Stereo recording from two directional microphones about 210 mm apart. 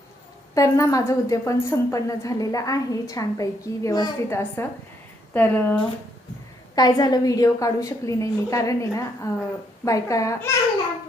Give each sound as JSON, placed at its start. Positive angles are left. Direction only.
{"t": 0.5, "sound": "a woman's voice", "side_deg": 15}
{"t": 6.7, "sound": "a woman's voice", "side_deg": 20}